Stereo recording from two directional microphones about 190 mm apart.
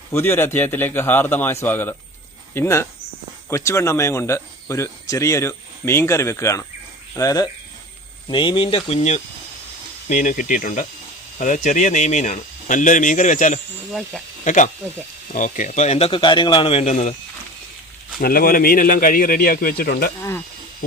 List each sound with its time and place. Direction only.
0.1 s speech: 15° left (ahead or behind); by 17.2 s 35° left (ahead or behind)
18.2 s speech: 50° left (ahead or behind)